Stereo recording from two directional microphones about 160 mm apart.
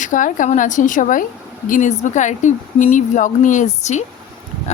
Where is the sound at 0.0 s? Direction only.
55° left (ahead or behind).